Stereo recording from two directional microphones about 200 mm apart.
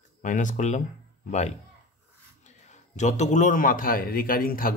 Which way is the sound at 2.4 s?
35° left (ahead or behind).